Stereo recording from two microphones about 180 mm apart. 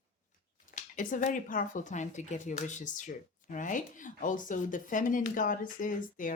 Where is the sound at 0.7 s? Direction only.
45° left (ahead or behind).